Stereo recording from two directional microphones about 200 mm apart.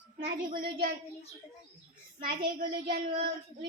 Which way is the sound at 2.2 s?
45° right (ahead or behind).